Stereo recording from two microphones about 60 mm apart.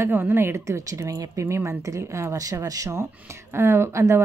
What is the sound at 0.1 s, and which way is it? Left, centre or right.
Speech, right.